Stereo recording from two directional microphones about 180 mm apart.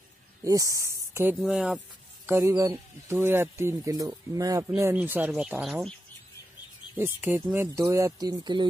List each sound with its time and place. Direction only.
0.4 s speech: 20° right (ahead or behind)
2.2 s speech: 15° right (ahead or behind)
7.0 s speech: 10° right (ahead or behind)